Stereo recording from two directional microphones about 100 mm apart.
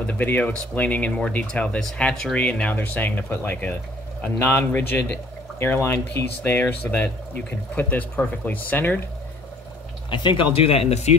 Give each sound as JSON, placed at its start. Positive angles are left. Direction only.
{"t": 0.0, "sound": "speech", "side_deg": 15}
{"t": 10.0, "sound": "speech", "side_deg": 55}
{"t": 10.7, "sound": "speech", "side_deg": 90}